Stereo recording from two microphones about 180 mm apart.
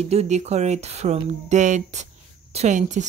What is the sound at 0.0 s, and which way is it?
Speech, 35° right (ahead or behind).